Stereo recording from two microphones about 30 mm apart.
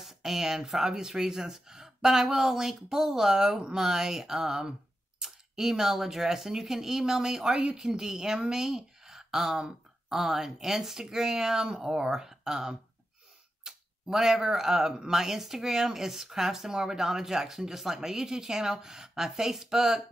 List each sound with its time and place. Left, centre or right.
0.0 s speech: centre
13.7 s tick-tock: centre
14.0 s speech: centre